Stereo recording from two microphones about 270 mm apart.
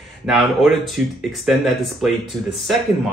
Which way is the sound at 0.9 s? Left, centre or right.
Centre.